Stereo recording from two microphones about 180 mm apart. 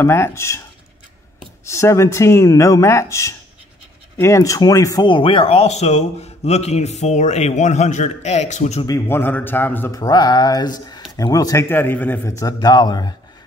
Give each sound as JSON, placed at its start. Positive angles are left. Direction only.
{"t": 0.0, "sound": "speech", "side_deg": 15}
{"t": 1.7, "sound": "speech", "side_deg": 15}
{"t": 8.8, "sound": "a man's voice", "side_deg": 15}